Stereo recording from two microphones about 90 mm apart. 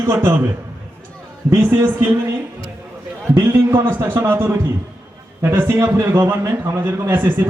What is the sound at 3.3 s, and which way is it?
A man's voice, 25° right (ahead or behind).